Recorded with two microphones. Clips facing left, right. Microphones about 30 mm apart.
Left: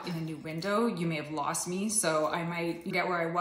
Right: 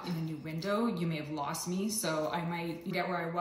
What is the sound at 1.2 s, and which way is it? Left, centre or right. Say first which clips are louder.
A woman's voice: left 3 dB; left.